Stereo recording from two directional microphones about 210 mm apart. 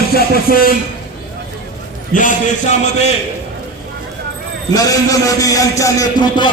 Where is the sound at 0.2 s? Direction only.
45° left (ahead or behind).